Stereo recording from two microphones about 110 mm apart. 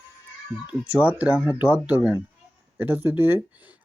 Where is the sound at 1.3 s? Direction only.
30° left (ahead or behind).